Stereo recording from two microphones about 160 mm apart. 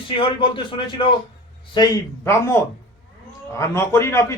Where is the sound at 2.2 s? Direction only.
15° left (ahead or behind).